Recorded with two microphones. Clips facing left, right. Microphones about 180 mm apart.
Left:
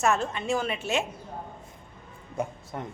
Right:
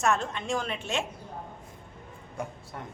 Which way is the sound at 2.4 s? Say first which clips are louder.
Left 5 dB; 20° left (ahead or behind).